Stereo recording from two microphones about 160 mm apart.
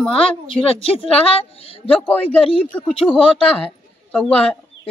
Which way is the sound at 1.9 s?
10° left (ahead or behind).